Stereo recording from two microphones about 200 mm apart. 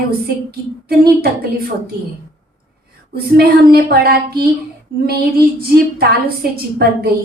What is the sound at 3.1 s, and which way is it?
Child singing, 50° right (ahead or behind).